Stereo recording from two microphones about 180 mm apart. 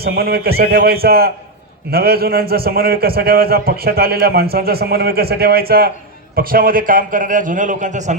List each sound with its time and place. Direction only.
0.0 s a man's voice: 60° right (ahead or behind); by 8.1 s 40° right (ahead or behind)